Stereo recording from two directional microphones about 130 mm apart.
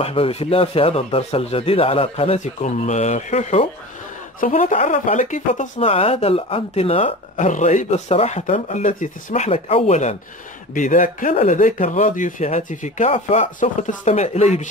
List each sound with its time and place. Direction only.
0.0 s speech: 50° left (ahead or behind)
4.4 s speech: 90° left; by 5.7 s 75° left (ahead or behind)
5.8 s speech: 50° left (ahead or behind)
7.3 s speech: 70° left (ahead or behind)
10.7 s speech: 80° left; by 14.7 s 60° left (ahead or behind)